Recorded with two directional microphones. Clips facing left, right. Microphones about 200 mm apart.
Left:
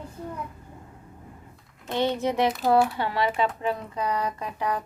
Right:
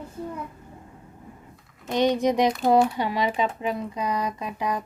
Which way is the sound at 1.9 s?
15° right (ahead or behind).